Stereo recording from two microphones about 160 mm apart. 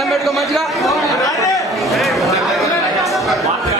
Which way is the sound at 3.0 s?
Centre (ahead or behind).